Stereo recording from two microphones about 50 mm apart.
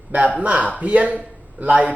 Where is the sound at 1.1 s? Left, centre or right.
Right.